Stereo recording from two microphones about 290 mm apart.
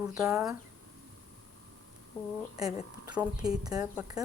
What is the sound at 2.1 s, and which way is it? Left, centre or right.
Speech, centre.